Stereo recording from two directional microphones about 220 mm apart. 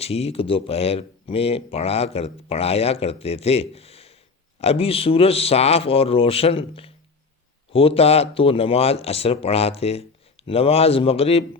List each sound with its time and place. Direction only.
0.0 s speech: 25° left (ahead or behind)